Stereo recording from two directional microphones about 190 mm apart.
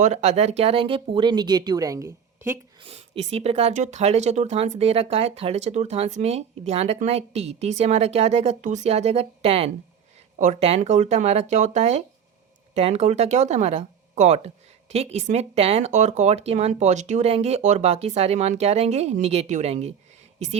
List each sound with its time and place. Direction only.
0.0 s speech: 35° right (ahead or behind); by 2.6 s 15° right (ahead or behind)
2.8 s speech: 35° right (ahead or behind)